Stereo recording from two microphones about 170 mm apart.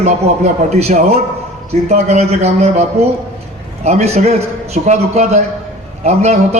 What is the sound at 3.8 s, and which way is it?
A man's voice, 40° right (ahead or behind).